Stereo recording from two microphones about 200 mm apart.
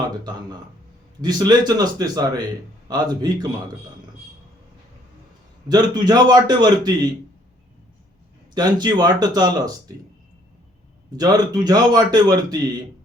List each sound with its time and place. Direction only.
1.2 s a man's voice: 20° right (ahead or behind)
5.6 s a man's voice: 20° right (ahead or behind)
8.5 s a man's voice: 20° right (ahead or behind)
11.2 s a man's voice: 20° right (ahead or behind)